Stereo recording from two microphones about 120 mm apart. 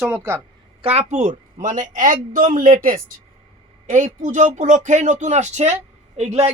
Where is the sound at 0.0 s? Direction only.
15° right (ahead or behind).